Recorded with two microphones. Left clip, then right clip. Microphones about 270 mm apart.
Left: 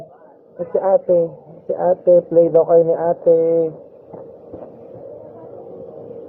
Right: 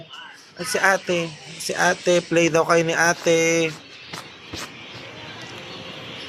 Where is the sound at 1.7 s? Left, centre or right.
Right.